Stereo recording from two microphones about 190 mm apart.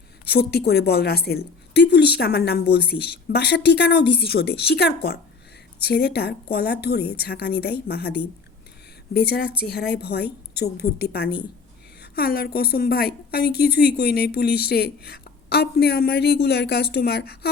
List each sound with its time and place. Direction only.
0.3 s a woman's voice: 55° left (ahead or behind)
9.1 s a woman's voice: 55° left (ahead or behind)